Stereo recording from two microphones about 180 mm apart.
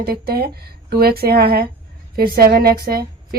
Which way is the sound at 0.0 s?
60° right (ahead or behind).